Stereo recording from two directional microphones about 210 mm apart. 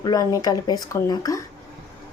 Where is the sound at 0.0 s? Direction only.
20° left (ahead or behind).